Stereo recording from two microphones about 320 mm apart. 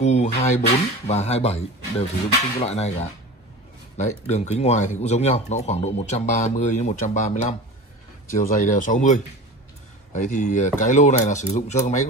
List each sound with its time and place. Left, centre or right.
0.0 s a sound: left
0.4 s speech: left
4.3 s speech: left